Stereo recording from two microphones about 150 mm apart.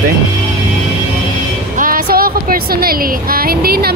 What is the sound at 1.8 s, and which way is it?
A woman's voice, 70° right (ahead or behind).